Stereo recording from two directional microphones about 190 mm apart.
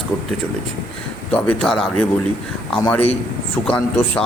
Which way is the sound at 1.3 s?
5° left (ahead or behind).